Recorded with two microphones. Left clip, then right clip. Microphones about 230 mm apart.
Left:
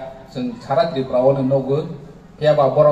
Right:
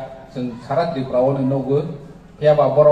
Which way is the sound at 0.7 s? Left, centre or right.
Left.